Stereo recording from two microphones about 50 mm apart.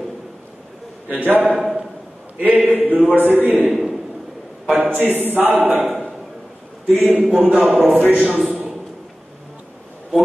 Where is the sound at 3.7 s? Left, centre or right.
Centre.